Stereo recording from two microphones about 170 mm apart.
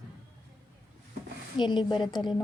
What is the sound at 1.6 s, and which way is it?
Speech, 25° left (ahead or behind).